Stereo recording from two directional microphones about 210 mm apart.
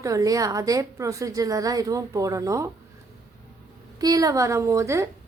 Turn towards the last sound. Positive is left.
turn(degrees=-15)  # may be behind; listen again after turning